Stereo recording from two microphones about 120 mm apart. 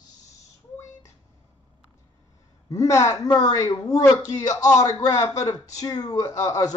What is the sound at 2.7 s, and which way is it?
A man's voice, 25° left (ahead or behind).